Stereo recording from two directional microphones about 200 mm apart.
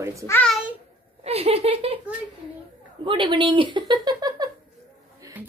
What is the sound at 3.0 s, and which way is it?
Speech, 25° right (ahead or behind).